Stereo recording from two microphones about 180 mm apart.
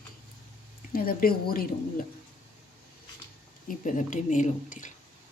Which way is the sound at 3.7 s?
45° left (ahead or behind).